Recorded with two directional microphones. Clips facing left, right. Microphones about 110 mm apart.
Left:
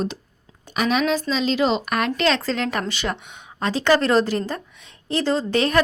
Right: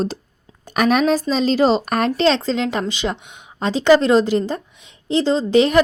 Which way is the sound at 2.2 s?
25° right (ahead or behind).